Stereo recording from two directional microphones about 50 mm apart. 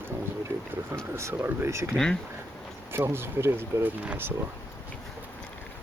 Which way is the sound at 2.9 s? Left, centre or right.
Right.